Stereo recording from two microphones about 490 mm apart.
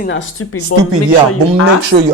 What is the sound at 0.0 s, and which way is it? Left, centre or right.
Speech, left.